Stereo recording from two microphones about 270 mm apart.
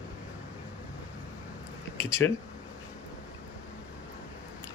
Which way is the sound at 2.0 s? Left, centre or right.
Centre.